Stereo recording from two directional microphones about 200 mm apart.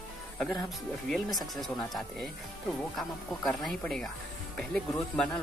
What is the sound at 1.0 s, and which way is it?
Speech, centre (ahead or behind).